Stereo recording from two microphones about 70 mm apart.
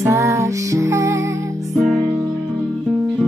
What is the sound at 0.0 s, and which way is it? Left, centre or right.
Music, right.